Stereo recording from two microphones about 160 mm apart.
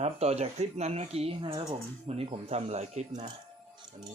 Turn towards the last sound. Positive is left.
turn(degrees=-45)  # may be behind; listen again after turning